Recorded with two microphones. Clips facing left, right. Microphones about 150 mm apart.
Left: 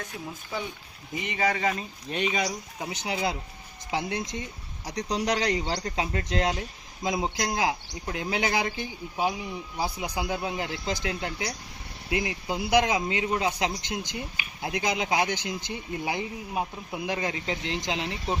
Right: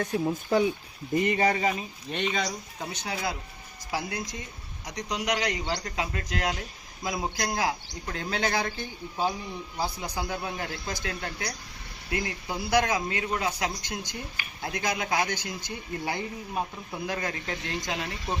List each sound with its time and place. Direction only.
1.1 s speech: 55° right (ahead or behind)
1.5 s speech: 25° right (ahead or behind)
1.7 s speech: centre (ahead or behind); by 18.3 s 20° left (ahead or behind)